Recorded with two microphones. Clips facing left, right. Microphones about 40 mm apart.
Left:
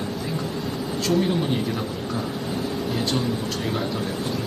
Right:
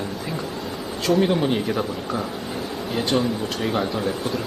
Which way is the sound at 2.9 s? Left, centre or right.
Centre.